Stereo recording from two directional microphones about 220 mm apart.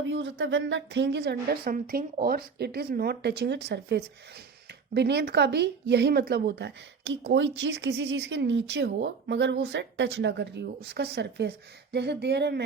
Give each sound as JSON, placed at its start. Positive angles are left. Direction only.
{"t": 0.0, "sound": "a woman's voice", "side_deg": -55}